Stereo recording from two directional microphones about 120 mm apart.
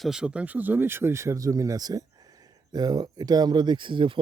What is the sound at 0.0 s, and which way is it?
Speech, 5° right (ahead or behind).